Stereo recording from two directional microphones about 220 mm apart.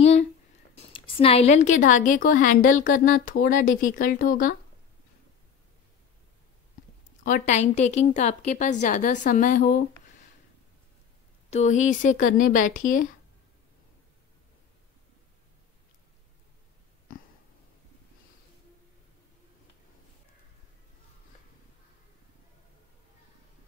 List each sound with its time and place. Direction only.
0.0 s a sound: 30° left (ahead or behind)
0.9 s a woman's voice: 25° left (ahead or behind)
7.2 s a woman's voice: 35° left (ahead or behind)
11.5 s a woman's voice: 35° left (ahead or behind)